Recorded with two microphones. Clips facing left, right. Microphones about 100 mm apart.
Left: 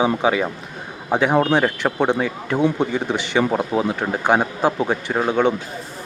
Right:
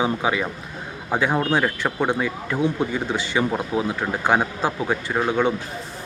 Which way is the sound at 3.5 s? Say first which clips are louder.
Left 4 dB; 35° left (ahead or behind).